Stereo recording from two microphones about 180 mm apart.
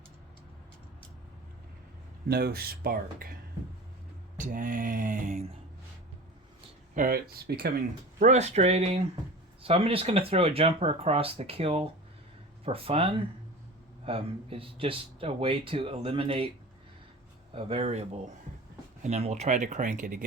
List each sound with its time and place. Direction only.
2.3 s speech: 60° right (ahead or behind)
4.4 s a sound: 50° right (ahead or behind)
6.9 s speech: 55° right (ahead or behind)
8.2 s speech: 40° right (ahead or behind)
17.5 s speech: 30° right (ahead or behind); by 20.2 s 50° right (ahead or behind)